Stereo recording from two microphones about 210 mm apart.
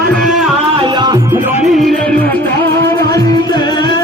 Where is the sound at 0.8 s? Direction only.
20° right (ahead or behind).